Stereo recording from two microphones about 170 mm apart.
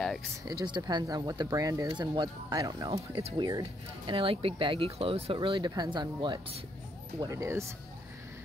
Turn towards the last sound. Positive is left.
turn(degrees=-15)  # may be behind; listen again after turning